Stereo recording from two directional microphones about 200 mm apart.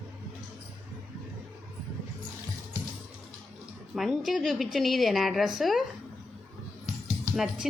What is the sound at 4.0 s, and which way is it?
A woman's voice, centre (ahead or behind).